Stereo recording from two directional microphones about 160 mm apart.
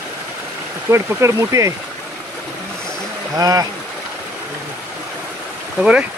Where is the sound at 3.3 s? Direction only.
25° right (ahead or behind).